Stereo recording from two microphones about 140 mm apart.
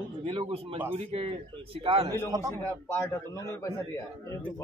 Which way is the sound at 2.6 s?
15° left (ahead or behind).